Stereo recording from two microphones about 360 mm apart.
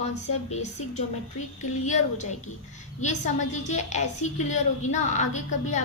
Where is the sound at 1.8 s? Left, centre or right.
Centre.